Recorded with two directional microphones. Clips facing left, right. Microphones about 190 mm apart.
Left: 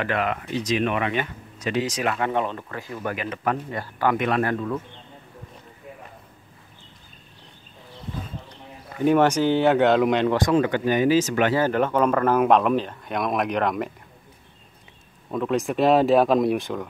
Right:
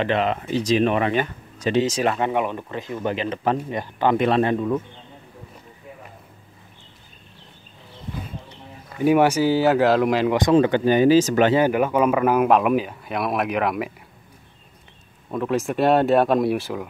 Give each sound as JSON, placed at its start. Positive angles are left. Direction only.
{"t": 0.0, "sound": "speech", "side_deg": -25}
{"t": 9.0, "sound": "speech", "side_deg": -10}
{"t": 10.3, "sound": "speech", "side_deg": -25}
{"t": 11.5, "sound": "speech", "side_deg": -10}
{"t": 15.3, "sound": "speech", "side_deg": 0}